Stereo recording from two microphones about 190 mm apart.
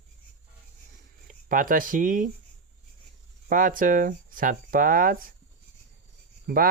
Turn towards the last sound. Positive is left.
turn(degrees=-55)  # may be behind; listen again after turning